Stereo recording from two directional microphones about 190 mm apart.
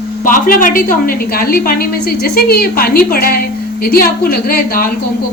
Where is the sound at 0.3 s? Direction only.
45° left (ahead or behind).